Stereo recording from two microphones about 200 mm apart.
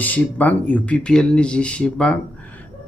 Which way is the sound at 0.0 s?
10° left (ahead or behind).